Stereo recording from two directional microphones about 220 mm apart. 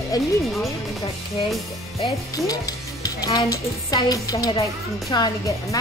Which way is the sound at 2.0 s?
15° left (ahead or behind).